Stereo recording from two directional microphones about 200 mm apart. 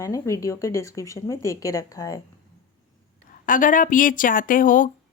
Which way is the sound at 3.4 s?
40° left (ahead or behind).